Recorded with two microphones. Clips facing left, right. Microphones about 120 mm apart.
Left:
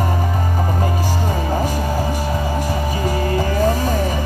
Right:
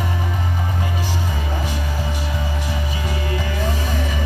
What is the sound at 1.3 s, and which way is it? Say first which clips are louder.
Music: left 6 dB; 40° left (ahead or behind).